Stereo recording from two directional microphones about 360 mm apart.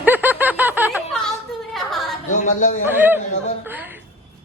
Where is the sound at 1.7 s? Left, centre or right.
Centre.